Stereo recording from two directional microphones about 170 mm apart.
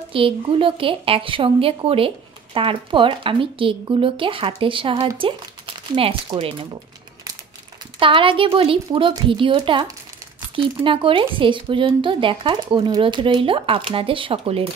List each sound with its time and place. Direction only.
0.1 s a woman's voice: 30° right (ahead or behind)
8.0 s a woman's voice: 30° right (ahead or behind)